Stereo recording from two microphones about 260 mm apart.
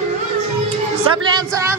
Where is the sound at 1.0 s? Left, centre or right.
Centre.